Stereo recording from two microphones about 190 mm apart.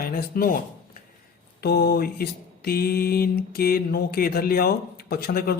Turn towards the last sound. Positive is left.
turn(degrees=50)  # may be behind; listen again after turning